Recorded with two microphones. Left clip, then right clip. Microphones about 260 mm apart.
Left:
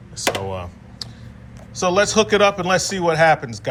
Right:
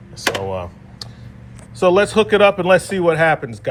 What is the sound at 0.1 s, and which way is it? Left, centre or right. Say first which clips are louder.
A man's voice: right 2 dB; centre.